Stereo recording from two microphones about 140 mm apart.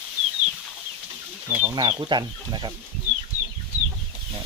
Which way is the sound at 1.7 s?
35° right (ahead or behind).